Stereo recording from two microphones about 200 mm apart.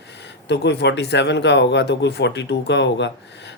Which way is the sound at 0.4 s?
60° left (ahead or behind).